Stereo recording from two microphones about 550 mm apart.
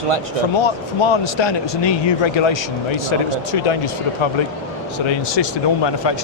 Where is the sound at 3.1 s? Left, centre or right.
Left.